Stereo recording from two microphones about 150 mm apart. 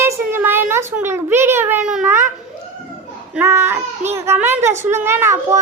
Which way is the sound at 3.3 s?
15° right (ahead or behind).